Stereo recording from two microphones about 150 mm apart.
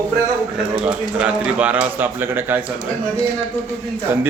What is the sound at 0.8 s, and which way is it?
A man's voice, 10° right (ahead or behind).